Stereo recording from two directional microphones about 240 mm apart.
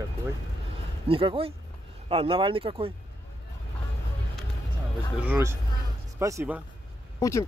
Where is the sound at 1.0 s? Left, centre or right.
Right.